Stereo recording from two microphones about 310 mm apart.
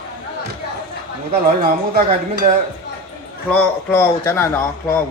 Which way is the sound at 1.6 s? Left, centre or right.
Right.